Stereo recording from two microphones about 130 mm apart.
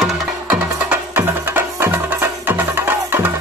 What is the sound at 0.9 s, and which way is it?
Music, 15° right (ahead or behind).